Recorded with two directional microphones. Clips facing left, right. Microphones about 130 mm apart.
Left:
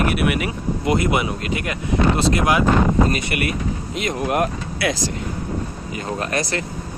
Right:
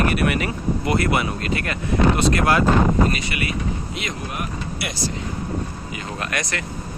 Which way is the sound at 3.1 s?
50° left (ahead or behind).